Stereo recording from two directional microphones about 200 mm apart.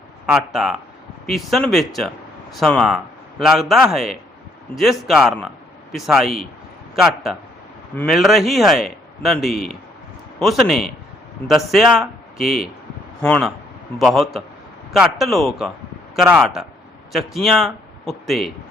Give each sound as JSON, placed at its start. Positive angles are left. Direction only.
{"t": 0.3, "sound": "a man's voice", "side_deg": 0}